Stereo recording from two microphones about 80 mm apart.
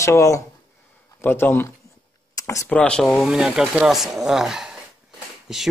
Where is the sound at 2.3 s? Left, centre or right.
Left.